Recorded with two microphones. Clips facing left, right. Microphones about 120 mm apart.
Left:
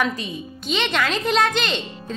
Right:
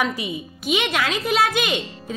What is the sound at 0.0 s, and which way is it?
A woman's voice, 10° right (ahead or behind).